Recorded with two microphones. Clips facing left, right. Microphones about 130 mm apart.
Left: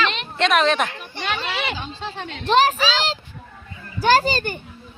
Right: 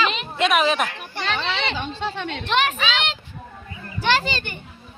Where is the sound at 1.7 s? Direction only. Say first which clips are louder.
Right 3 dB; 65° right (ahead or behind).